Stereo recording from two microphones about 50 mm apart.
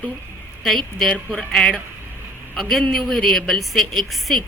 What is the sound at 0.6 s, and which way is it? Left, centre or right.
Speech, centre.